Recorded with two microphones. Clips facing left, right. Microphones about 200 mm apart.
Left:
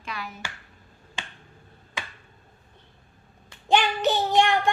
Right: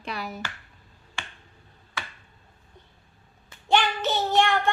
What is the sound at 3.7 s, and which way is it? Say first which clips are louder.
Child singing: left 2 dB; 15° left (ahead or behind).